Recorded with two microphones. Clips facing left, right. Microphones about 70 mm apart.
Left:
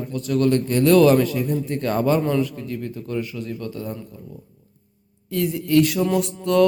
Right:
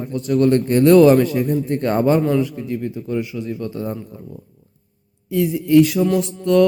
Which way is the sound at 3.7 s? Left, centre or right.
Right.